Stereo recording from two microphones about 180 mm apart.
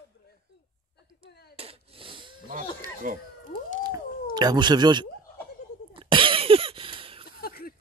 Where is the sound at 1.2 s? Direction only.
65° left (ahead or behind).